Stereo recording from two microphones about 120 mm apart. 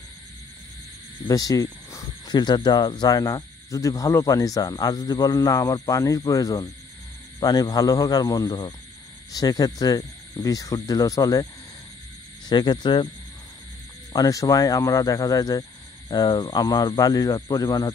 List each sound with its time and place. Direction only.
1.2 s speech: 30° left (ahead or behind)
12.4 s speech: 35° left (ahead or behind)
14.1 s speech: 30° left (ahead or behind)